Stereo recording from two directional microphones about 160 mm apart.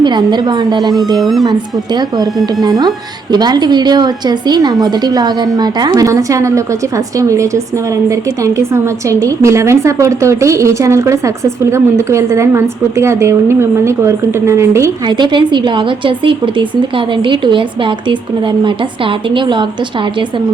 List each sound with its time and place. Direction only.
0.0 s a woman's voice: 30° right (ahead or behind)
1.1 s speech: centre (ahead or behind)
1.5 s a woman's voice: 25° right (ahead or behind)